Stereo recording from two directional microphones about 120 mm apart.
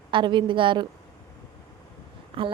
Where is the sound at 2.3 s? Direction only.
50° right (ahead or behind).